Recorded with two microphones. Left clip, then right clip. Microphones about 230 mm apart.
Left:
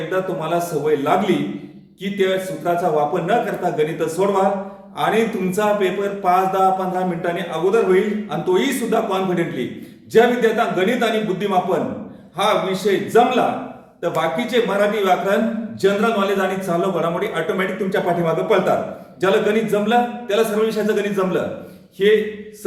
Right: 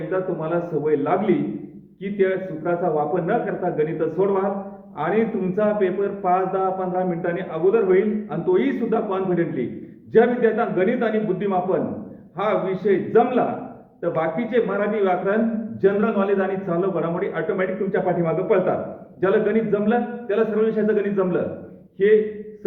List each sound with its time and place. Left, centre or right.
0.1 s speech: centre